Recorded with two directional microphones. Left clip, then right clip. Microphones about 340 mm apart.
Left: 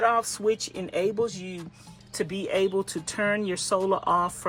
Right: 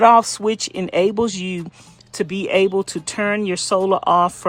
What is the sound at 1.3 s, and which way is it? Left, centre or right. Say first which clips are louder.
Speech: right 10 dB; right.